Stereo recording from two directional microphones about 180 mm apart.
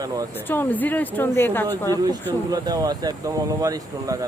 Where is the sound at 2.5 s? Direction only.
20° right (ahead or behind).